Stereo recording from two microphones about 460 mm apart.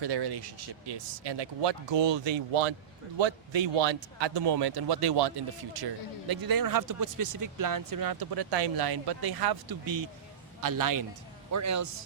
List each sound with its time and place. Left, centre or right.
0.0 s a man's voice: right